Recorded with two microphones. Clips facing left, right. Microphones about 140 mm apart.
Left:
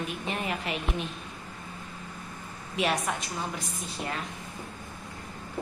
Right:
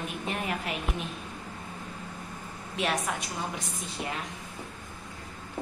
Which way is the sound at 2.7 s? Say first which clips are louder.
Left 2 dB; 5° left (ahead or behind).